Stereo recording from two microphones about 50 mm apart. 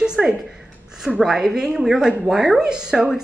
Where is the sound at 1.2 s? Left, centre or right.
Centre.